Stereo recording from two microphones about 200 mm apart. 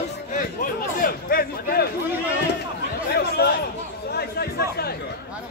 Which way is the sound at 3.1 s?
55° left (ahead or behind).